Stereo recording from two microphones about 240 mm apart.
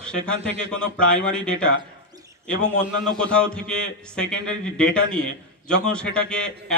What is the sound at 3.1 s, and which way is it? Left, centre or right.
A man's voice, centre.